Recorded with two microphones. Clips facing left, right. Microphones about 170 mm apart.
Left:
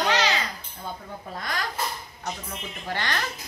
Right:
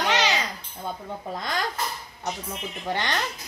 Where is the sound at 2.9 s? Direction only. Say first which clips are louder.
Right 2 dB; 20° right (ahead or behind).